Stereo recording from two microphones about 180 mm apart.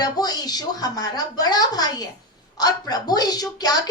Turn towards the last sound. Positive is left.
turn(degrees=20)  # may be behind; listen again after turning